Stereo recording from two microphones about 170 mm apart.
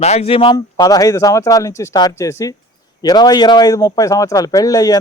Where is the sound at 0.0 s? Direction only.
40° left (ahead or behind).